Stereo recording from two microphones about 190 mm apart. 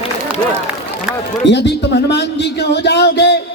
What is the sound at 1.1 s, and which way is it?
Run, 5° right (ahead or behind).